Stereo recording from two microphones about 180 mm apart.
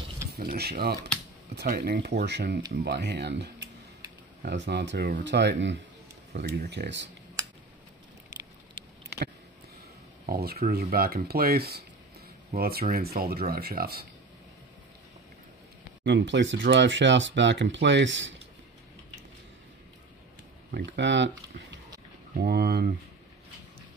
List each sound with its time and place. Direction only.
0.3 s speech: 60° right (ahead or behind); by 5.8 s 80° right
6.3 s speech: 60° right (ahead or behind)
10.2 s speech: 55° right (ahead or behind)
16.0 s speech: 75° right (ahead or behind)
20.7 s speech: 75° right (ahead or behind)
22.4 s speech: 60° right (ahead or behind)